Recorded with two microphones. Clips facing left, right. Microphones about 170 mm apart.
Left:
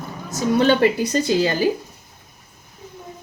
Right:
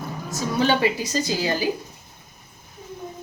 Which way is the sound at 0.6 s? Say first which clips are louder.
Left 5 dB; 55° left (ahead or behind).